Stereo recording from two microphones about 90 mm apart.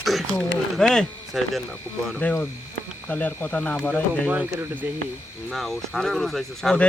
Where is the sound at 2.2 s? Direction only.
15° left (ahead or behind).